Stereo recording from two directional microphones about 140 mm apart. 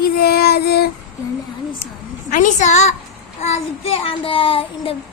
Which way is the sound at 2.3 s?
65° left (ahead or behind).